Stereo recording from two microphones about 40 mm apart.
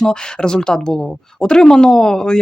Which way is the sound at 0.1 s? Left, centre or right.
Centre.